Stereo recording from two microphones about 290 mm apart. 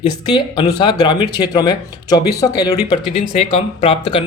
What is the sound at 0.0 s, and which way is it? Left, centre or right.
Speech, centre.